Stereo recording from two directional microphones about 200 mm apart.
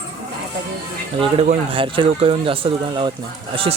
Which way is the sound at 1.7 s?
25° right (ahead or behind).